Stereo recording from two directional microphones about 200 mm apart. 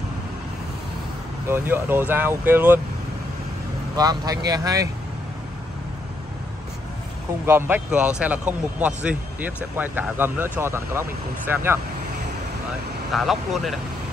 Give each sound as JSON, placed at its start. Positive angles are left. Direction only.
{"t": 1.5, "sound": "a man's voice", "side_deg": -10}
{"t": 3.9, "sound": "speech", "side_deg": -20}
{"t": 7.4, "sound": "a man's voice", "side_deg": -10}
{"t": 13.1, "sound": "speech", "side_deg": 0}